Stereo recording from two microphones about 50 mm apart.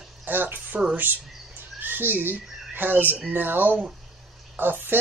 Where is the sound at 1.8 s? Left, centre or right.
Right.